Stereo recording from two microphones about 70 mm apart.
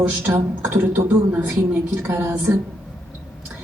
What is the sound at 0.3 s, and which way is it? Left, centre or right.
A woman's voice, right.